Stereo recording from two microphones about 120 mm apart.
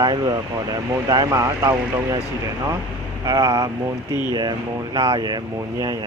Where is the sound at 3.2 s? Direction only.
35° right (ahead or behind).